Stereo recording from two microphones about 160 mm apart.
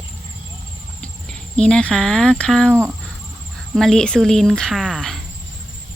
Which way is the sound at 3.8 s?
5° left (ahead or behind).